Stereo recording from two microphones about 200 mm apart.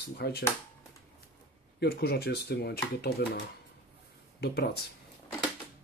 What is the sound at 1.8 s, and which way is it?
Speech, 50° left (ahead or behind).